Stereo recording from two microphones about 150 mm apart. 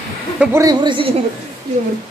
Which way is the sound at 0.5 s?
25° right (ahead or behind).